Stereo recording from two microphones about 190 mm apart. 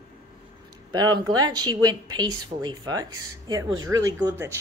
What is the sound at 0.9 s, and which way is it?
Speech, 20° right (ahead or behind).